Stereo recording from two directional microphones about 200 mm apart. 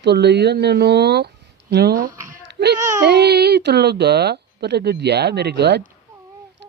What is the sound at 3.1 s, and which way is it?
Speech, 55° right (ahead or behind).